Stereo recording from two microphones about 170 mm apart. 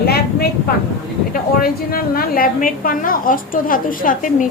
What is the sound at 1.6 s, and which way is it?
A woman's voice, 60° left (ahead or behind).